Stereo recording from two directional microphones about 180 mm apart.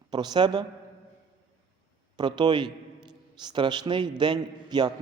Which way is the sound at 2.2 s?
25° right (ahead or behind).